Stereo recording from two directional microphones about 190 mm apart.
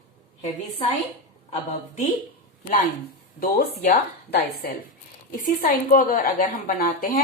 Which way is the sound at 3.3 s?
50° left (ahead or behind).